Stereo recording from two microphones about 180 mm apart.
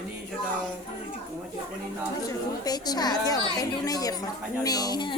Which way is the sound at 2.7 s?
20° left (ahead or behind).